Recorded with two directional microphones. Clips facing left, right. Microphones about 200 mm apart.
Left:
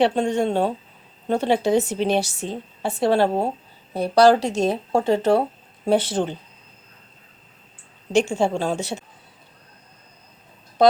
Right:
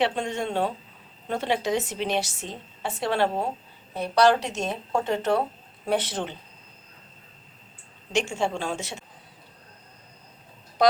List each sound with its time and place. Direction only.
0.0 s a woman's voice: 35° left (ahead or behind)
8.1 s a woman's voice: 35° left (ahead or behind)